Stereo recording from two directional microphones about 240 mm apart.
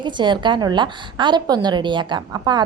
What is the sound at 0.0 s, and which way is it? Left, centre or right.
A woman's voice, centre.